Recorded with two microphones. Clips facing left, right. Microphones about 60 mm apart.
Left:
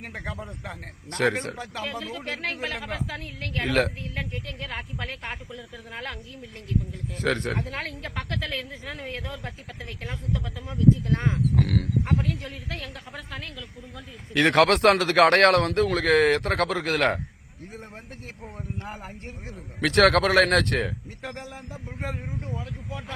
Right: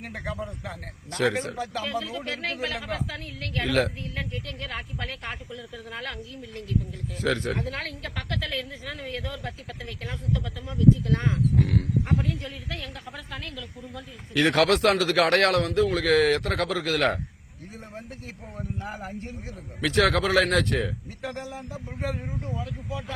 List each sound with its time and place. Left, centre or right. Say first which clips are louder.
0.0 s a man's voice: right 2 dB; left
1.1 s a man's voice: even; left
3.7 s a man's voice: left 1 dB; left
4.1 s speech: even; left
7.2 s a man's voice: even; left
7.6 s speech: even; left
11.5 s speech: even; left
14.3 s a man's voice: left 2 dB; left
18.9 s a man's voice: right 4 dB; left
19.8 s speech: left 3 dB; left
21.2 s a man's voice: right 5 dB; left
22.6 s a man's voice: right 2 dB; left